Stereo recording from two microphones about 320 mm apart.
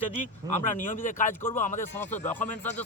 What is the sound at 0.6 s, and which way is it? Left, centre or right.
Speech, left.